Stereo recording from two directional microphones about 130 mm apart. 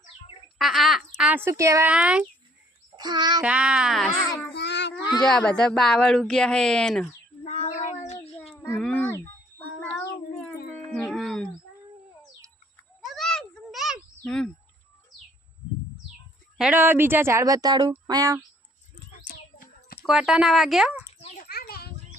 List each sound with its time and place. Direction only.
0.6 s speech: centre (ahead or behind)
1.2 s speech: 15° right (ahead or behind)
1.9 s speech: 10° right (ahead or behind)
2.9 s a child's voice: 35° right (ahead or behind)
3.4 s speech: 10° right (ahead or behind)
5.2 s speech: 5° left (ahead or behind)
7.4 s cat: 65° left (ahead or behind)
8.8 s a sound: 10° left (ahead or behind)
10.9 s music: 5° left (ahead or behind)
13.1 s a sound: 5° left (ahead or behind)
14.3 s bird: 5° left (ahead or behind)
16.6 s speech: 10° right (ahead or behind); by 18.3 s 25° right (ahead or behind)
20.1 s speech: 5° right (ahead or behind)
21.1 s children playing: 55° left (ahead or behind); by 21.7 s 80° left